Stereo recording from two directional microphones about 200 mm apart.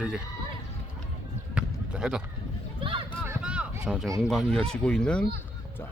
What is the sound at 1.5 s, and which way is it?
Basketball bounce, 5° right (ahead or behind).